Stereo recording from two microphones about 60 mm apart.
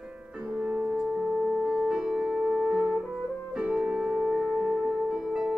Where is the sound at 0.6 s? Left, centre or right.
Centre.